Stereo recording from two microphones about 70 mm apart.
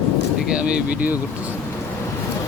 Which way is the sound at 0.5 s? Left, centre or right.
Centre.